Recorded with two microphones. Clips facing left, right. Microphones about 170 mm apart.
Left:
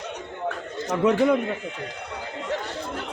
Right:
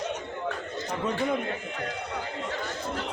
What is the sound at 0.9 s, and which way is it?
Speech, 70° left (ahead or behind).